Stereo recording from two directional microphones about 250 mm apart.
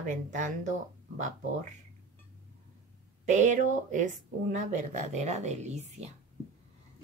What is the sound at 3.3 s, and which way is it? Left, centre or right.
Speech, right.